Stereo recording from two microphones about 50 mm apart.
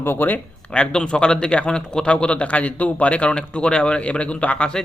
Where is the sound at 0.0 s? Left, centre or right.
Left.